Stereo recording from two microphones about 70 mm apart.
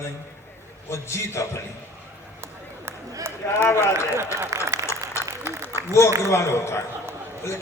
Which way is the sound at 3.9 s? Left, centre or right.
Right.